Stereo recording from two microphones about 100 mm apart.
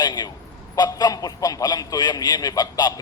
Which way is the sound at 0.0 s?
40° left (ahead or behind).